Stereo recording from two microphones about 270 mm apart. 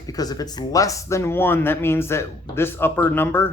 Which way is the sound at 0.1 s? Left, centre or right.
Centre.